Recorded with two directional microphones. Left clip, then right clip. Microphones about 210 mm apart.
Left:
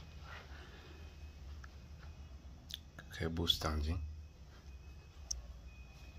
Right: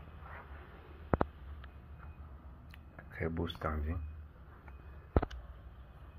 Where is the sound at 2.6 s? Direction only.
25° left (ahead or behind).